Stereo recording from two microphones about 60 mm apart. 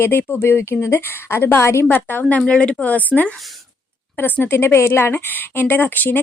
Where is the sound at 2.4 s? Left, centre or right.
Centre.